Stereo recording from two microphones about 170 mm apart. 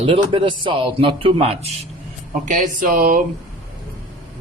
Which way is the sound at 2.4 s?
50° right (ahead or behind).